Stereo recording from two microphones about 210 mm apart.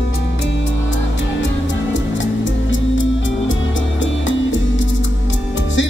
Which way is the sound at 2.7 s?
65° left (ahead or behind).